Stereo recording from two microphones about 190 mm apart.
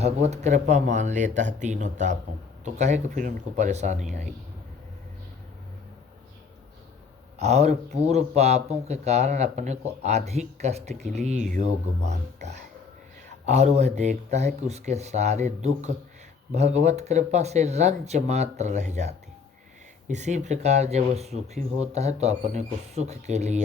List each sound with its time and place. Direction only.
0.0 s a man's voice: 35° right (ahead or behind)
7.3 s a man's voice: 35° right (ahead or behind)